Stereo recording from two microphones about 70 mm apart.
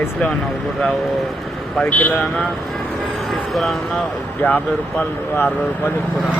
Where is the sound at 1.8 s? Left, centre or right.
Left.